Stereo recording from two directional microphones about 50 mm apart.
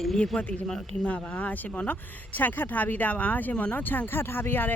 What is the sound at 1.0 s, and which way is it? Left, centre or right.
Speech, left.